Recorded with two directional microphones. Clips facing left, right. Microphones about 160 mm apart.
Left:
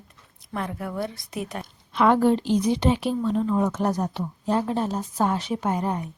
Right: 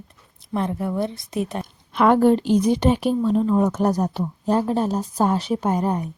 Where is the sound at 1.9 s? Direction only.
50° right (ahead or behind).